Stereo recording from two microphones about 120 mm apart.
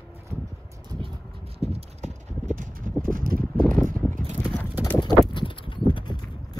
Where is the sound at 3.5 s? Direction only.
5° left (ahead or behind).